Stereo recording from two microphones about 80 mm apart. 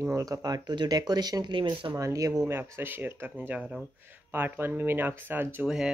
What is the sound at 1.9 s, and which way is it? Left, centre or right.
Speech, right.